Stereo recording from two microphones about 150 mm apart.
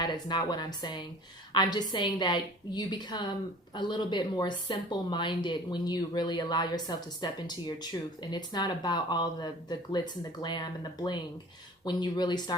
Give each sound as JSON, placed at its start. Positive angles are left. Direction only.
{"t": 0.0, "sound": "speech", "side_deg": 30}